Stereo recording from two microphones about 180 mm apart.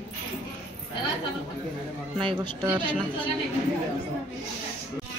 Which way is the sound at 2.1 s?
30° right (ahead or behind).